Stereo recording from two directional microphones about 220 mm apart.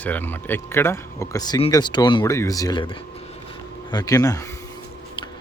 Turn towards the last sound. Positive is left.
turn(degrees=15)  # may be behind; listen again after turning